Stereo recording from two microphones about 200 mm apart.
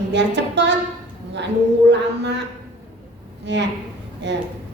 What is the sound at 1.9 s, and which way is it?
Speech, 60° right (ahead or behind).